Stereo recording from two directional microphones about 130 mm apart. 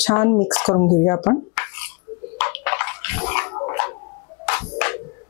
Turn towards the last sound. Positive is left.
turn(degrees=20)  # may be behind; listen again after turning